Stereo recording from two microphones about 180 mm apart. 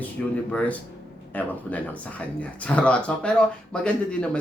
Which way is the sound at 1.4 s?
10° left (ahead or behind).